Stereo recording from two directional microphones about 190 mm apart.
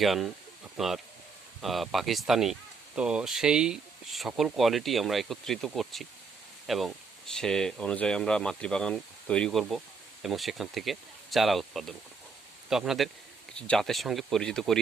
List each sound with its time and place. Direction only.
0.0 s speech: centre (ahead or behind)